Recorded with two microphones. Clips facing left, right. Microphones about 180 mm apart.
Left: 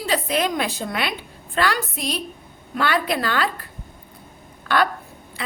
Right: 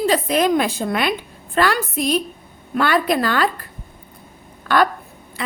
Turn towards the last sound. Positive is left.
turn(degrees=-45)  # may be behind; listen again after turning